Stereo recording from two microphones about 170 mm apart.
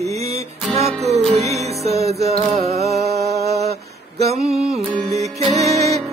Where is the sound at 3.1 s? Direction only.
70° right (ahead or behind).